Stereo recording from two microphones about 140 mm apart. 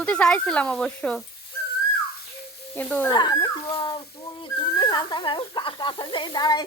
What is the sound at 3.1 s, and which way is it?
Speech, 30° left (ahead or behind).